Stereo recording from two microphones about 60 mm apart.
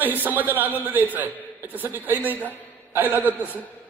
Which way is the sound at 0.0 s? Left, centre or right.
Right.